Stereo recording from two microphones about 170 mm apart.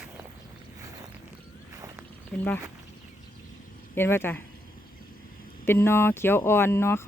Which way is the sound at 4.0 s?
15° left (ahead or behind).